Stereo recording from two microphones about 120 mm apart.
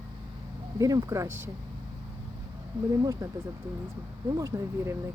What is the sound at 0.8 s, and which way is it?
Speech, 30° right (ahead or behind).